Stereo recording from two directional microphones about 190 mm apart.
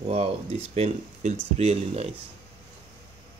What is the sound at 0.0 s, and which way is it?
Speech, 30° right (ahead or behind).